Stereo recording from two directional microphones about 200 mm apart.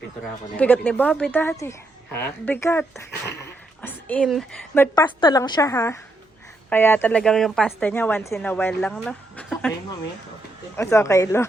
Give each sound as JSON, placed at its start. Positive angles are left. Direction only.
{"t": 0.5, "sound": "a woman's voice", "side_deg": 5}
{"t": 5.2, "sound": "a woman's voice", "side_deg": 20}
{"t": 10.8, "sound": "a woman's voice", "side_deg": 15}